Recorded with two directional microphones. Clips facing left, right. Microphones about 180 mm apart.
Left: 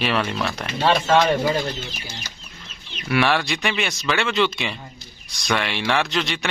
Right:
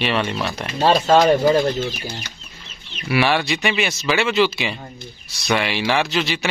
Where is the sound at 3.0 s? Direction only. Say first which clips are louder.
Right 1 dB; 5° right (ahead or behind).